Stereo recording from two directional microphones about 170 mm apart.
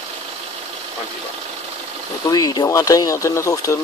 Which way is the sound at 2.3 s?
20° left (ahead or behind).